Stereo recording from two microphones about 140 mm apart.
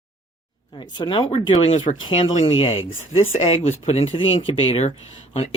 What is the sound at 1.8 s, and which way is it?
Speech, 35° left (ahead or behind).